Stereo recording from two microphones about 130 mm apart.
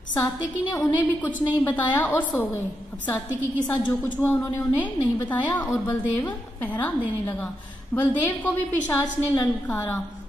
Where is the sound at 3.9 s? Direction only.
10° left (ahead or behind).